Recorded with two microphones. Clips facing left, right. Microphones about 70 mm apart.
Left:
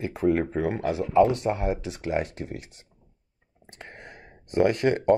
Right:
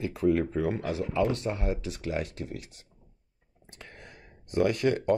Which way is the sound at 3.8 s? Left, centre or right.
Left.